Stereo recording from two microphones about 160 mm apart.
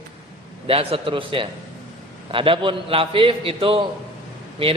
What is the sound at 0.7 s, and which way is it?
A man's voice, 35° right (ahead or behind).